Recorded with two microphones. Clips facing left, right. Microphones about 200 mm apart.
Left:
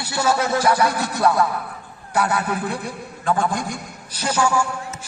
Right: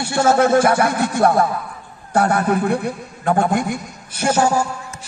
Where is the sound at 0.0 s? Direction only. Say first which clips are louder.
Right 6 dB; 50° right (ahead or behind).